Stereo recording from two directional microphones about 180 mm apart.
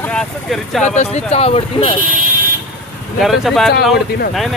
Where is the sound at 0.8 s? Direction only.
40° left (ahead or behind).